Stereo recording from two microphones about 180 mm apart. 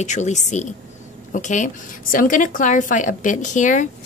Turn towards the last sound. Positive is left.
turn(degrees=45)  # may be behind; listen again after turning